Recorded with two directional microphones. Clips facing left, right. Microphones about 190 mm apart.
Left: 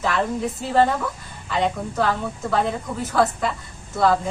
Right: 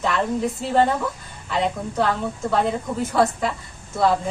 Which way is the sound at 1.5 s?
Centre (ahead or behind).